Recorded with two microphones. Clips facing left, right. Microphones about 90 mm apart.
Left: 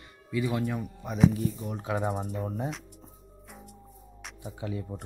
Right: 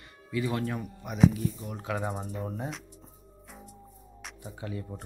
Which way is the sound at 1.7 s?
20° left (ahead or behind).